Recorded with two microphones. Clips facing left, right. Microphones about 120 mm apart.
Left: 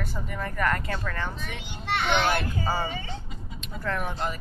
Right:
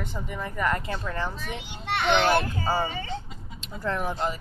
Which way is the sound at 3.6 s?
30° right (ahead or behind).